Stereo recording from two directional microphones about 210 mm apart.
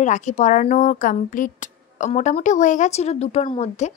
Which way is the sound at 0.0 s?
35° left (ahead or behind).